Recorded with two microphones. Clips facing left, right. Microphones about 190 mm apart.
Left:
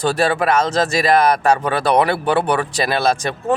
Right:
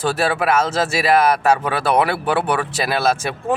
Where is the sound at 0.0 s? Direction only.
5° right (ahead or behind).